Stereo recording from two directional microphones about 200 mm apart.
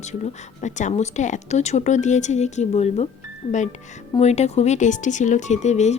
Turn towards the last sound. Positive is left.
turn(degrees=35)  # may be behind; listen again after turning